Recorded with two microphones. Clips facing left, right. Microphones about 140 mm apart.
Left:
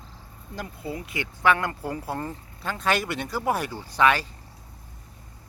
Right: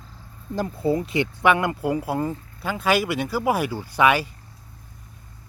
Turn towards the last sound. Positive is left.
turn(degrees=-10)  # may be behind; listen again after turning